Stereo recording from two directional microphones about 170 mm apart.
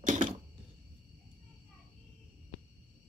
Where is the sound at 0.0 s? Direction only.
45° right (ahead or behind).